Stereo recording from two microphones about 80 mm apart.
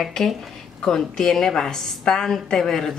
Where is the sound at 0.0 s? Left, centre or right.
Centre.